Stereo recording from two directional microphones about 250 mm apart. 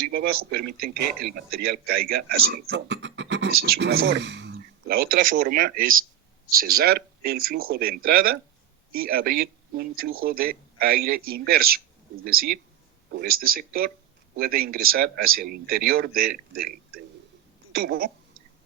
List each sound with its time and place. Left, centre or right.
0.1 s a man's voice: right